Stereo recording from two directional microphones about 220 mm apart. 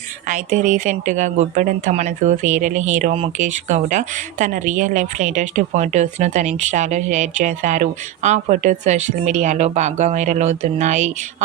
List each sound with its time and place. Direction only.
0.3 s speech: 35° right (ahead or behind)